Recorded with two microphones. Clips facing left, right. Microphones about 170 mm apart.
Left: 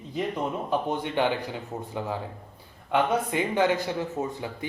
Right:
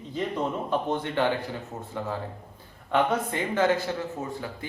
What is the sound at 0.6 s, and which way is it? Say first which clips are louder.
Speech: even; 15° left (ahead or behind).